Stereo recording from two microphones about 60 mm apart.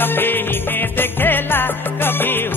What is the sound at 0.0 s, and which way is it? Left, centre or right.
Music, left.